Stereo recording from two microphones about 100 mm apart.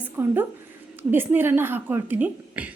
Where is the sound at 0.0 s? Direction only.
20° right (ahead or behind).